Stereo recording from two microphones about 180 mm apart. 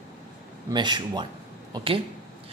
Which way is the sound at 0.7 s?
25° right (ahead or behind).